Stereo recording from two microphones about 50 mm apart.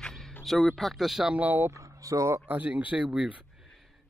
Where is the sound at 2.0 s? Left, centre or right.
Right.